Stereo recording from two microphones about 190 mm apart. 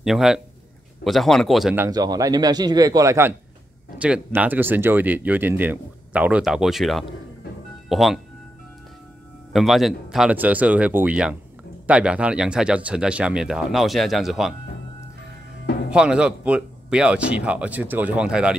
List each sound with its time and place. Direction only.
0.0 s speech: 5° right (ahead or behind)
1.9 s a man's voice: 20° right (ahead or behind); by 8.2 s centre (ahead or behind)
9.5 s speech: centre (ahead or behind)
15.9 s speech: 5° right (ahead or behind)